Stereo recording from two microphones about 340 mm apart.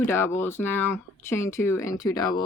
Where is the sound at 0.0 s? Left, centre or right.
Centre.